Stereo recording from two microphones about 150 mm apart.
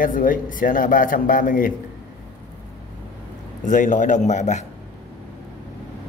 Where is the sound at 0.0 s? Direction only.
65° left (ahead or behind).